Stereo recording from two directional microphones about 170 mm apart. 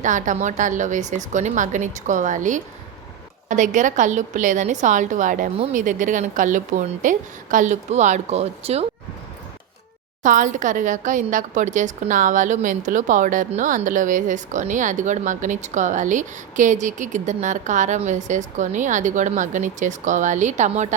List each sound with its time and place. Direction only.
0.0 s a woman's voice: 45° right (ahead or behind)
10.2 s a woman's voice: 50° right (ahead or behind)